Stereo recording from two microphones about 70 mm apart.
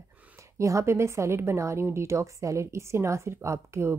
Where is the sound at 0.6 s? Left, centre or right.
Right.